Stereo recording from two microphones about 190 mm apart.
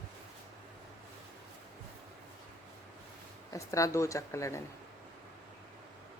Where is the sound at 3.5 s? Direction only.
15° left (ahead or behind).